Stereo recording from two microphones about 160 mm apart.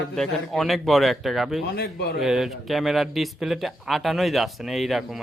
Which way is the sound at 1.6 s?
85° left.